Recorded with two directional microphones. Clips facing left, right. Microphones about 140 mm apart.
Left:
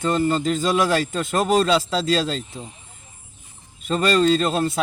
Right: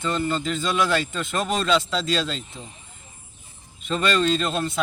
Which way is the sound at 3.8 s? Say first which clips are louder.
Left 4 dB; 40° left (ahead or behind).